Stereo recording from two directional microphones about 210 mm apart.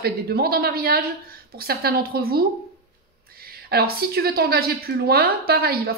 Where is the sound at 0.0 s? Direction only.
45° right (ahead or behind).